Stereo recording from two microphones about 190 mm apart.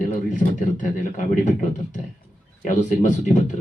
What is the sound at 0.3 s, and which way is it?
Speech, 40° left (ahead or behind).